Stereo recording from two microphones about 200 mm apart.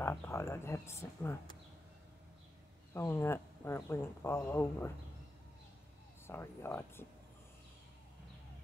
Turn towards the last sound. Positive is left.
turn(degrees=10)  # may be behind; listen again after turning